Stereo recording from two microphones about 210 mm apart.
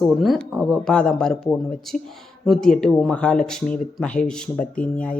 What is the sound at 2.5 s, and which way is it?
Speech, centre (ahead or behind).